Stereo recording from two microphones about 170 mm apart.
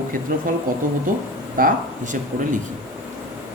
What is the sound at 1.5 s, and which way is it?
Speech, 55° right (ahead or behind).